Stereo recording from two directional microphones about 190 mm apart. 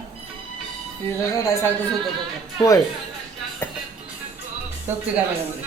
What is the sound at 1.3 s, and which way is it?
Speech, 15° left (ahead or behind).